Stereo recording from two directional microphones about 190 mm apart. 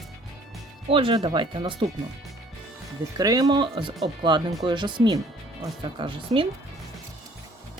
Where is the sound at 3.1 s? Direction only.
20° right (ahead or behind).